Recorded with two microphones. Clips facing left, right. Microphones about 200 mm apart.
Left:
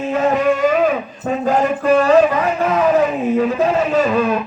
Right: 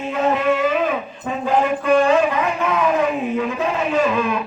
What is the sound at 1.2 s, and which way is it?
Speech, 40° left (ahead or behind).